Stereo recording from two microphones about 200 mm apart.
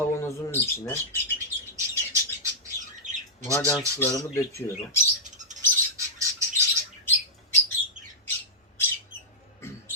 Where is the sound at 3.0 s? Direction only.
40° right (ahead or behind).